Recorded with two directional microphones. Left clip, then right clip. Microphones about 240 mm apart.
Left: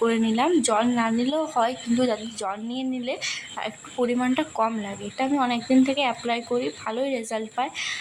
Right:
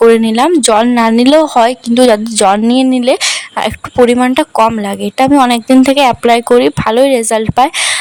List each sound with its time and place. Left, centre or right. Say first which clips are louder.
0.0 s speech: right 15 dB; right